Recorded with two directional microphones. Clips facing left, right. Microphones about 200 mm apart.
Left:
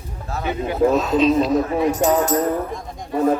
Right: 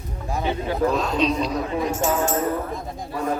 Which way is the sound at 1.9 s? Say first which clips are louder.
Left 4 dB; 35° left (ahead or behind).